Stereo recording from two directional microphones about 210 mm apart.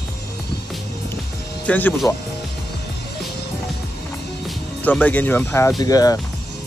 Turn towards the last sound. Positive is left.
turn(degrees=15)  # may be behind; listen again after turning